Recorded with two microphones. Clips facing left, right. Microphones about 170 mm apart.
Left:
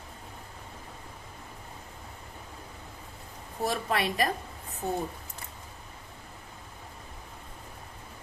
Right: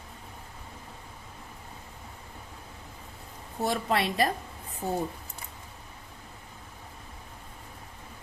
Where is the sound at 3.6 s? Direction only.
25° right (ahead or behind).